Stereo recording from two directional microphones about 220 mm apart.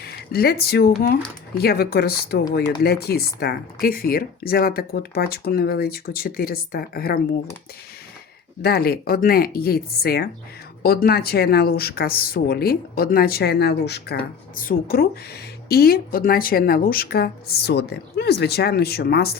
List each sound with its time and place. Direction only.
0.0 s speech: 45° left (ahead or behind)
8.6 s speech: 45° left (ahead or behind)